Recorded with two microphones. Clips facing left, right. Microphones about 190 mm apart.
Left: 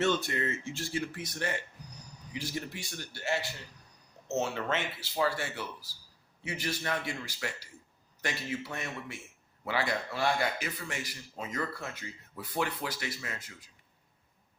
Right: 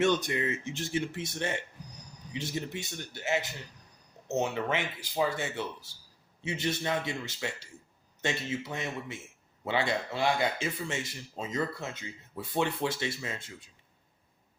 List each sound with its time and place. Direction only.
0.0 s speech: 15° right (ahead or behind)